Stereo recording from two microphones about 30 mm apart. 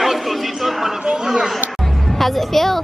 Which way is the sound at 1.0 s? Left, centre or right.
Right.